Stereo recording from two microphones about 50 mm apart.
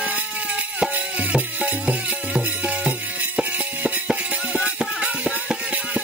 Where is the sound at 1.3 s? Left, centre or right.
Right.